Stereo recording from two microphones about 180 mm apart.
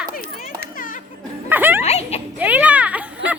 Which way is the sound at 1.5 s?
10° right (ahead or behind).